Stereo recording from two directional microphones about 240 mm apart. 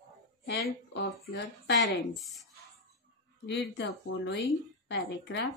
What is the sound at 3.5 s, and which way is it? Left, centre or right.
Speech, left.